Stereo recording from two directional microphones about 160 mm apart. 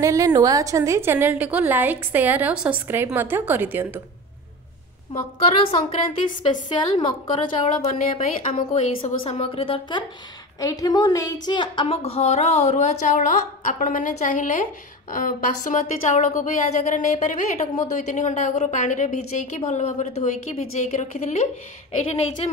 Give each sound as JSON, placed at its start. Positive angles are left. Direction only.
{"t": 0.0, "sound": "a woman's voice", "side_deg": -20}
{"t": 5.1, "sound": "a woman's voice", "side_deg": 35}
{"t": 6.9, "sound": "a woman's voice", "side_deg": 35}
{"t": 8.1, "sound": "a woman's voice", "side_deg": 50}